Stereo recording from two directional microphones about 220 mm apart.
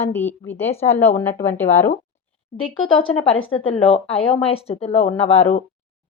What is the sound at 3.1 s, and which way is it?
Speech, 25° left (ahead or behind).